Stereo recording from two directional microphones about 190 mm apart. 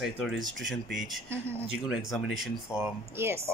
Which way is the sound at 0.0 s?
Centre (ahead or behind).